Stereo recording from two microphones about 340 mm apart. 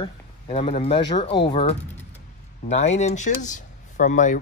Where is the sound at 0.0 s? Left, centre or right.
Centre.